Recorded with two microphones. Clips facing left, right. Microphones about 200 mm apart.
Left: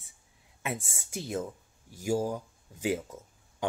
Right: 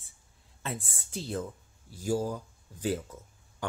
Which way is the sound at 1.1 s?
15° left (ahead or behind).